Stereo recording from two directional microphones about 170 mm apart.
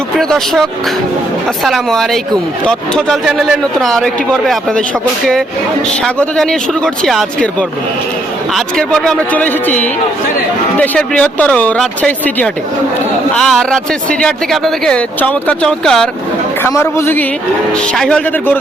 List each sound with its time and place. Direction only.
0.2 s speech: centre (ahead or behind)
6.1 s speech: 5° left (ahead or behind)
8.5 s speech: 5° left (ahead or behind)
16.6 s speech: 15° left (ahead or behind)